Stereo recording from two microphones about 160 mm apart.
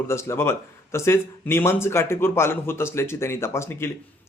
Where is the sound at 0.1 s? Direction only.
15° left (ahead or behind).